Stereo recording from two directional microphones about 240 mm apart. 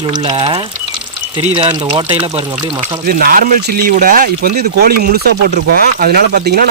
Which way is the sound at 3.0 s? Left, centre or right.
Right.